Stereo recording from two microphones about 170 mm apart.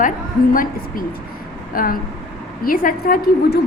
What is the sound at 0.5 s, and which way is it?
A woman's voice, 55° left (ahead or behind).